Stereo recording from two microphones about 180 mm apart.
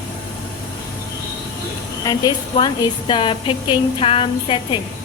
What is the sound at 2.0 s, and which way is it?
A woman's voice, 20° left (ahead or behind).